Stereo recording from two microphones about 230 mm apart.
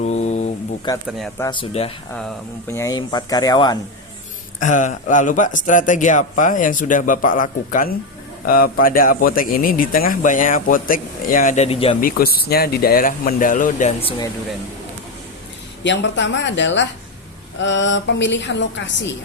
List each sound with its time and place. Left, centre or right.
0.0 s a sound: left
0.9 s speech: centre
4.6 s a man's voice: left
11.9 s a man's voice: left
15.8 s a woman's voice: left